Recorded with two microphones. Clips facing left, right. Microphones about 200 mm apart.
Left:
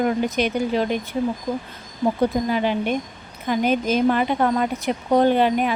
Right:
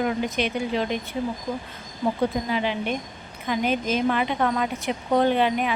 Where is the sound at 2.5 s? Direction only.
45° left (ahead or behind).